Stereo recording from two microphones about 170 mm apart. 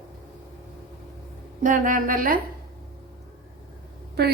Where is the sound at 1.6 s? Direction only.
50° right (ahead or behind).